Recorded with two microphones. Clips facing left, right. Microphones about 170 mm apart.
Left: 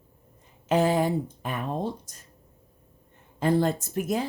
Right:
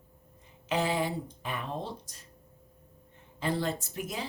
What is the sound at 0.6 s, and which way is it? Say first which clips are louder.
Speech: left 7 dB; 45° left (ahead or behind).